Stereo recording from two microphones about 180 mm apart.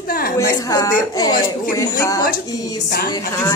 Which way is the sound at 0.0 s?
55° left (ahead or behind).